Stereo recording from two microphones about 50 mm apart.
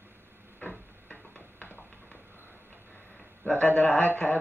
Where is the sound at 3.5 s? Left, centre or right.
Left.